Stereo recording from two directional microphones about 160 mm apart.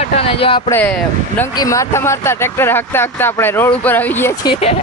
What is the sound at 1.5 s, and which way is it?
Speech, 20° left (ahead or behind).